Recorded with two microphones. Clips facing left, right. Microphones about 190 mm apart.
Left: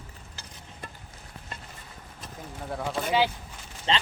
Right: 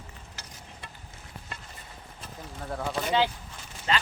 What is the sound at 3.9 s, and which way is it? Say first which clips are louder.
Speech: left 1 dB; 25° left (ahead or behind).